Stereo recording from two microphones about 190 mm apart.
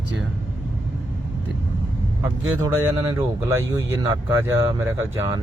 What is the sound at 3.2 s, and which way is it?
Speech, 15° right (ahead or behind).